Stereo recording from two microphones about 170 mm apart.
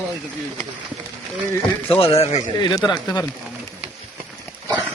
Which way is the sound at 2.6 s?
25° left (ahead or behind).